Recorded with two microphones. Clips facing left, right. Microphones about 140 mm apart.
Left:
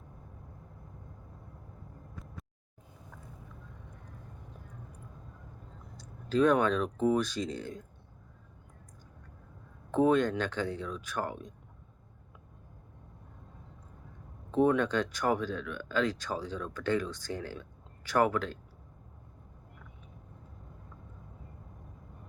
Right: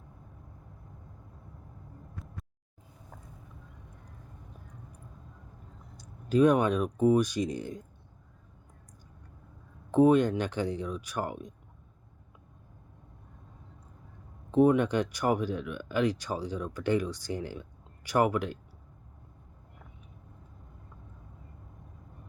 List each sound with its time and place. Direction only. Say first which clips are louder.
6.0 s speech: right 3 dB; 15° right (ahead or behind)
9.9 s speech: right 4 dB; 15° right (ahead or behind)
14.5 s speech: right 3 dB; 15° right (ahead or behind)